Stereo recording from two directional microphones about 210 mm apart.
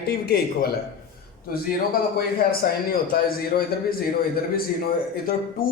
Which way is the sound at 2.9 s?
45° left (ahead or behind).